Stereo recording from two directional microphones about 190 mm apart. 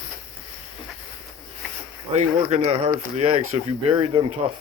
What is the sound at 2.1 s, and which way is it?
Speech, 35° right (ahead or behind).